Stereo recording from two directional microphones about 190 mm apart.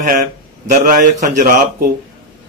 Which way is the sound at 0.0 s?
45° right (ahead or behind).